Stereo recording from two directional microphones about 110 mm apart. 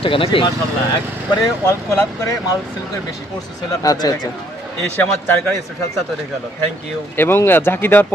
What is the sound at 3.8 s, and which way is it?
Speech, 35° left (ahead or behind).